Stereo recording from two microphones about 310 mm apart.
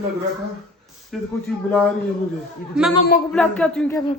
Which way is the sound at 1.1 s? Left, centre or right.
Centre.